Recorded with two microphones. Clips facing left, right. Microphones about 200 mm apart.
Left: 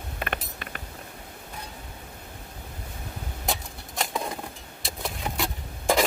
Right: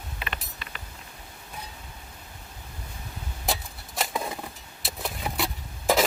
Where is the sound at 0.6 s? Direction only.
50° left (ahead or behind).